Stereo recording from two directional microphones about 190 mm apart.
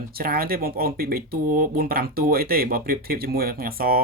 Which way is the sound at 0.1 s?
50° right (ahead or behind).